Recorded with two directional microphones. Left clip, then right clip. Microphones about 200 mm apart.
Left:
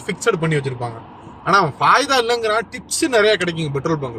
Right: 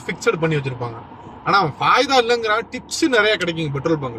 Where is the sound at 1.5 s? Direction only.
25° left (ahead or behind).